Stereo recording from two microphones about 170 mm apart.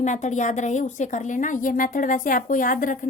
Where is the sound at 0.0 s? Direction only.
45° left (ahead or behind).